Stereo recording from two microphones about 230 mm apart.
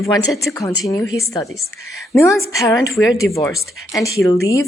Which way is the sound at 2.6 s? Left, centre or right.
Centre.